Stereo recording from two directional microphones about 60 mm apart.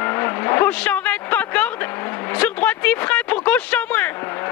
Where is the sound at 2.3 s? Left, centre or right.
Left.